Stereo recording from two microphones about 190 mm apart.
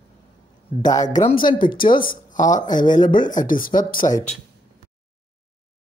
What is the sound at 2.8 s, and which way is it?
Speech, 25° left (ahead or behind).